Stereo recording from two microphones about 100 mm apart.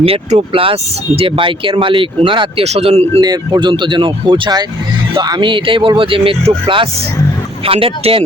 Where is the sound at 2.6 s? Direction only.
90° right.